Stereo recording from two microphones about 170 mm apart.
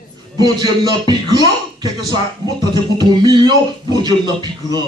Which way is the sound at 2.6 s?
25° right (ahead or behind).